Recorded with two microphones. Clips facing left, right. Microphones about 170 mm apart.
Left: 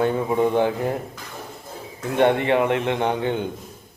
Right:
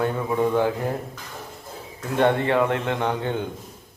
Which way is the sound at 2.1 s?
20° left (ahead or behind).